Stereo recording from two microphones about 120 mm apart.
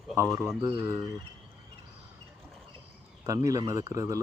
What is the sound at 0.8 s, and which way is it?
Speech, 20° right (ahead or behind).